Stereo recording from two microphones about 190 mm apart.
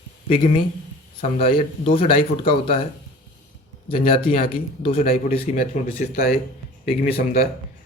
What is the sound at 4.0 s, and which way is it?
Speech, 30° left (ahead or behind).